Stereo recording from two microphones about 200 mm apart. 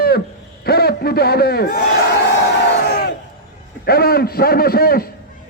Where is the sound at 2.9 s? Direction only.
50° left (ahead or behind).